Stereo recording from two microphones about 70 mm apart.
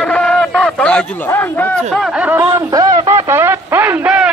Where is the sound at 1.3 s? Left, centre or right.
Left.